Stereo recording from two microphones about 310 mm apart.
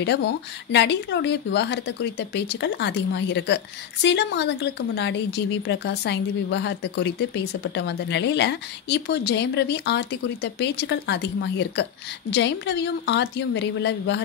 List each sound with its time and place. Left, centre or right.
0.0 s a woman's voice: left